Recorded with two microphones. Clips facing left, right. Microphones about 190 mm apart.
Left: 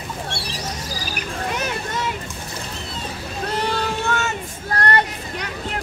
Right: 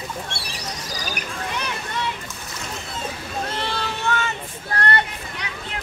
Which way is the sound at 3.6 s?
45° left (ahead or behind).